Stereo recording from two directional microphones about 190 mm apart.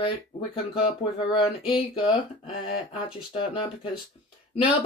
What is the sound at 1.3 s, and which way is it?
Speech, 25° left (ahead or behind).